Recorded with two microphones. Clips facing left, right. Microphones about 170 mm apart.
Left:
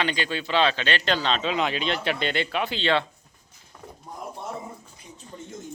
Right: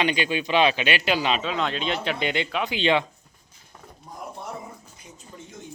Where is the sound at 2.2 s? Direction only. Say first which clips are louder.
Even; 15° right (ahead or behind).